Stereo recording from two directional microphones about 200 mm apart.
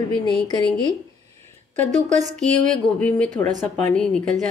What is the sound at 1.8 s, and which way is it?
Speech, 35° right (ahead or behind).